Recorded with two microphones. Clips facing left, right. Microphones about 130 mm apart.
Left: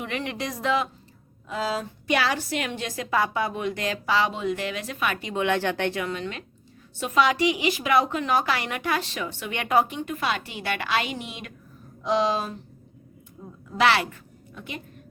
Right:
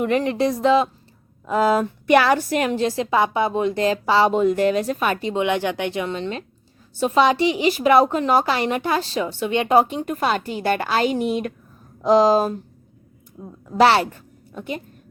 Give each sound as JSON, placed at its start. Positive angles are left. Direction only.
{"t": 0.0, "sound": "a woman's voice", "side_deg": -40}
{"t": 1.5, "sound": "a woman's voice", "side_deg": -50}
{"t": 5.4, "sound": "a woman's voice", "side_deg": -15}
{"t": 13.7, "sound": "a woman's voice", "side_deg": -35}